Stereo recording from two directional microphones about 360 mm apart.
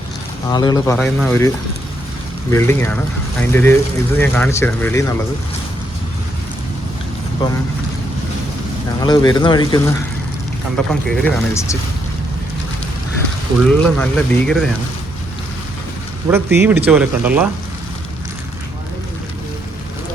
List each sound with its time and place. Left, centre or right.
0.5 s speech: centre
9.0 s speech: centre
13.6 s speech: centre
16.3 s speech: centre